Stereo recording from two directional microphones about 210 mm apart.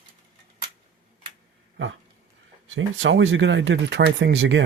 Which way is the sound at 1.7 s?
65° right (ahead or behind).